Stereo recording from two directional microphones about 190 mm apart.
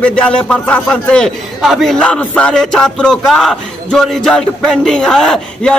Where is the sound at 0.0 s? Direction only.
5° left (ahead or behind).